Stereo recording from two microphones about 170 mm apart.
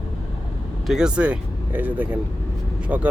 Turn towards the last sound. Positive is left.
turn(degrees=-10)  # may be behind; listen again after turning